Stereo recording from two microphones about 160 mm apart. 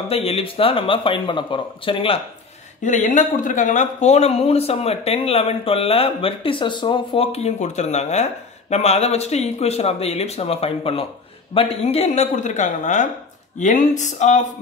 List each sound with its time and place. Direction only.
0.1 s speech: 40° left (ahead or behind)
2.8 s speech: 50° left (ahead or behind)